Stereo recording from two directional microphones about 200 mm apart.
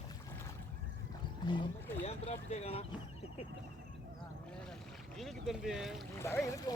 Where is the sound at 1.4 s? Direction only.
25° left (ahead or behind).